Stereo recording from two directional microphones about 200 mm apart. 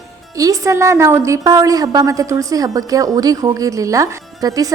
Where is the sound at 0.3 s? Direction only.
15° right (ahead or behind).